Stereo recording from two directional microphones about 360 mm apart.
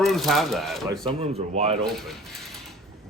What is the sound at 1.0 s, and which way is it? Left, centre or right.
Speech, centre.